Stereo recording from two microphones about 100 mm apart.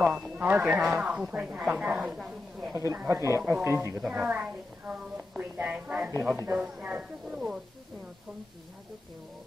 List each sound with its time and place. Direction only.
0.4 s a woman's voice: 20° right (ahead or behind)
0.7 s a woman's voice: 5° right (ahead or behind)
2.7 s speech: 30° right (ahead or behind)
4.0 s a woman's voice: 10° right (ahead or behind)